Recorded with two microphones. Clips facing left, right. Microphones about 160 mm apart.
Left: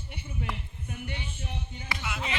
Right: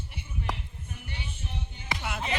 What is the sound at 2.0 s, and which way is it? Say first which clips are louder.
Music: right 1 dB; 45° right (ahead or behind).